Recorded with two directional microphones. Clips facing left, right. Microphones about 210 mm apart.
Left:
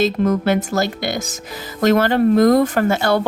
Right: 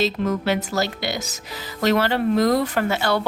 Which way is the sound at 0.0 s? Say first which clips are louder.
Left 5 dB; 50° left (ahead or behind).